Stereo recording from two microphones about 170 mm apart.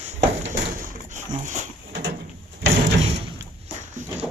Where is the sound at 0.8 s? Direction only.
55° right (ahead or behind).